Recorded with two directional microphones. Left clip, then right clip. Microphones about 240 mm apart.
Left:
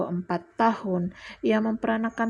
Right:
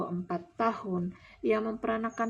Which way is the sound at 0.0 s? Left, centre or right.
Left.